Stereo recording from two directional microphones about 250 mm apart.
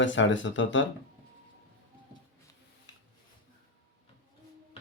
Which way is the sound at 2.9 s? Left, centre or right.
Left.